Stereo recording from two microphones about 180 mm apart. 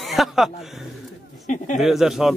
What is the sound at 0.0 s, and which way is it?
A man's voice, centre (ahead or behind).